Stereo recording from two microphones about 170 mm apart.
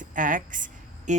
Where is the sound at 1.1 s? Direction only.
45° right (ahead or behind).